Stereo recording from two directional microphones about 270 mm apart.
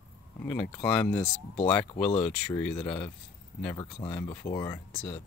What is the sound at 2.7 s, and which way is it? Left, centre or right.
Speech, centre.